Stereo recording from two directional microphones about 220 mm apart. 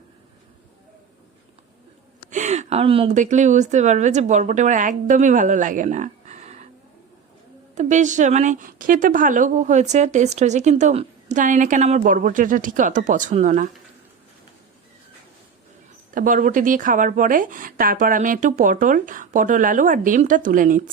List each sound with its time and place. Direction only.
2.3 s a woman's voice: 35° right (ahead or behind)
7.8 s speech: 35° right (ahead or behind)
16.1 s speech: 40° right (ahead or behind)